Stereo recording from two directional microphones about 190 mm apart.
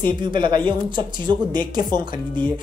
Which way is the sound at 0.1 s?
25° right (ahead or behind).